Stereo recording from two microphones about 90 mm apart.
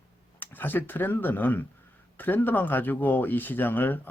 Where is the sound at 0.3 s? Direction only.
20° left (ahead or behind).